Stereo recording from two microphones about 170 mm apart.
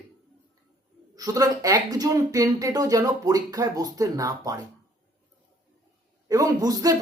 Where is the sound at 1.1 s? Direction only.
20° right (ahead or behind).